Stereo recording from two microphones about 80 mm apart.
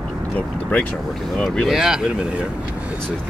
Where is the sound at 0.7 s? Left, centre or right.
Centre.